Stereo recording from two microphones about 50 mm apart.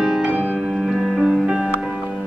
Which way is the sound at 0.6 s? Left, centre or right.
Centre.